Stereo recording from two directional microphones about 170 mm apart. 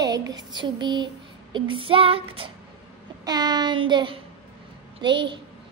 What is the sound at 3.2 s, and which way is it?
A child's voice, 25° right (ahead or behind).